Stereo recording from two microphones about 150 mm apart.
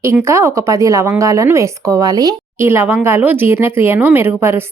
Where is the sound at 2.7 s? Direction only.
15° right (ahead or behind).